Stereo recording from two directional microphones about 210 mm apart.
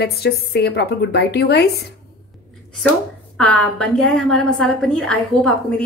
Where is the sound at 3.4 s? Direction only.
5° left (ahead or behind).